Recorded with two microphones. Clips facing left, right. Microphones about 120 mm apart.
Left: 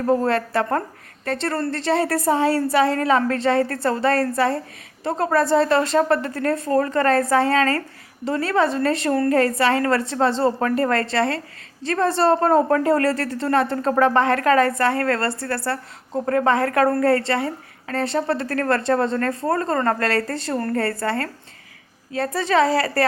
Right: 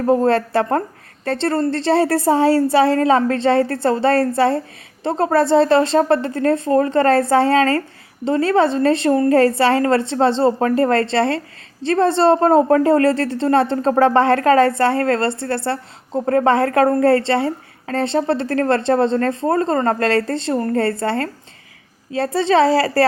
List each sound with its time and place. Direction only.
0.0 s a woman's voice: 25° right (ahead or behind)